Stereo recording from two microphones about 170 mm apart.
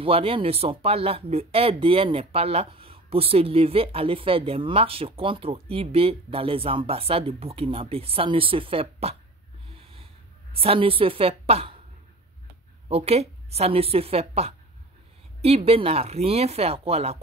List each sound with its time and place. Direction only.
0.0 s speech: 35° right (ahead or behind)
9.7 s snort: 35° right (ahead or behind)
10.5 s speech: 35° right (ahead or behind)
12.8 s speech: 35° right (ahead or behind)